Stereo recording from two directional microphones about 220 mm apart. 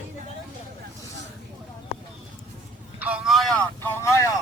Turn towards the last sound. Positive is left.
turn(degrees=10)  # may be behind; listen again after turning